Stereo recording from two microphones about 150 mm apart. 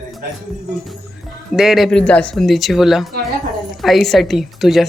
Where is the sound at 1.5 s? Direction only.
5° right (ahead or behind).